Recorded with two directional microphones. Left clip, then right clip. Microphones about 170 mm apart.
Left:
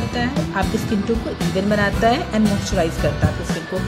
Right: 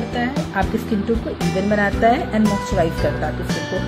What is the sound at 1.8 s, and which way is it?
Speech, 5° right (ahead or behind).